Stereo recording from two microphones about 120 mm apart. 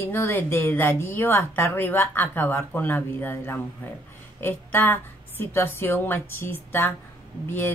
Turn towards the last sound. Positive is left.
turn(degrees=20)  # may be behind; listen again after turning